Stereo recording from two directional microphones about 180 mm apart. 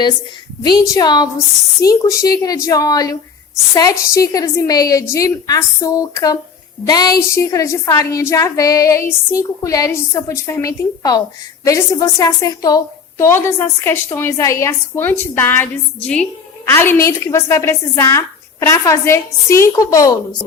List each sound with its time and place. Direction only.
0.9 s a woman's voice: 20° left (ahead or behind)
16.7 s a woman's voice: 15° left (ahead or behind)